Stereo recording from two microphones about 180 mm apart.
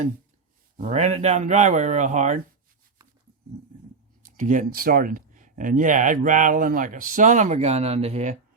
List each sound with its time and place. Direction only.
0.8 s speech: 40° right (ahead or behind)
4.3 s speech: 45° right (ahead or behind)